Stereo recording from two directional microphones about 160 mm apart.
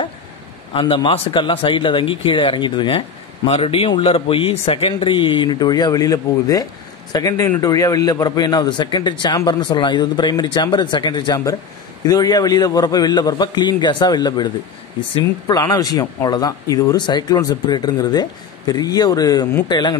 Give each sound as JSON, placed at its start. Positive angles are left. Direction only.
{"t": 0.7, "sound": "speech", "side_deg": 30}